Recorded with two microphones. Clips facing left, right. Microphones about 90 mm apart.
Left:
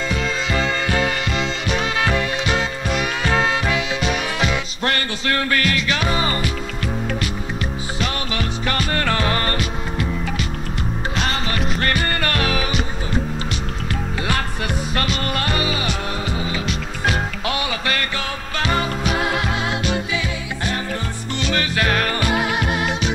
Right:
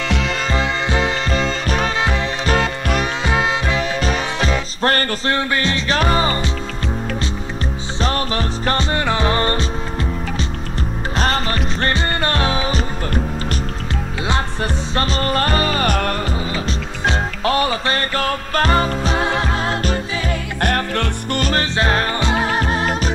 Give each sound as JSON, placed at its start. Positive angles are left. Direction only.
{"t": 0.6, "sound": "music", "side_deg": -20}
{"t": 1.3, "sound": "music", "side_deg": -40}
{"t": 2.0, "sound": "music", "side_deg": -20}
{"t": 3.3, "sound": "music", "side_deg": -20}
{"t": 3.7, "sound": "music", "side_deg": -35}
{"t": 5.3, "sound": "music", "side_deg": -25}
{"t": 8.0, "sound": "music", "side_deg": -35}
{"t": 8.9, "sound": "music", "side_deg": -20}
{"t": 11.1, "sound": "music", "side_deg": -40}
{"t": 15.0, "sound": "music", "side_deg": -35}
{"t": 16.3, "sound": "music", "side_deg": -30}
{"t": 20.6, "sound": "music", "side_deg": -65}
{"t": 21.4, "sound": "music", "side_deg": -40}
{"t": 21.7, "sound": "music", "side_deg": -30}